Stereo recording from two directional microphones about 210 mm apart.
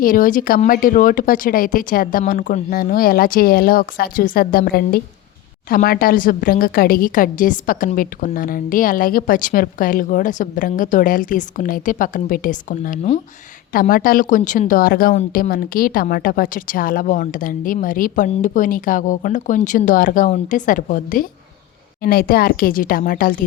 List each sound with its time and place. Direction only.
0.0 s a woman's voice: 40° left (ahead or behind)